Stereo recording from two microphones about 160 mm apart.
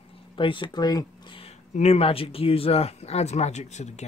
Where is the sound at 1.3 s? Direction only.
40° left (ahead or behind).